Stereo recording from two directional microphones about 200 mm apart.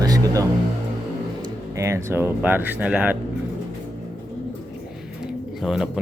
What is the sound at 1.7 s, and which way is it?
Speech, 15° right (ahead or behind).